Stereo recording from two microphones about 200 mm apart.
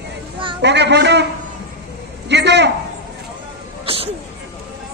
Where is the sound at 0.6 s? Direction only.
60° right (ahead or behind).